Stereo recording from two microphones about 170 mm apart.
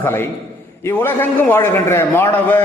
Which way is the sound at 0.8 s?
10° left (ahead or behind).